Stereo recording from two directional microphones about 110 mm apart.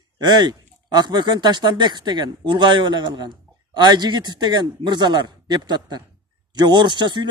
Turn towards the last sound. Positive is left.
turn(degrees=-45)  # may be behind; listen again after turning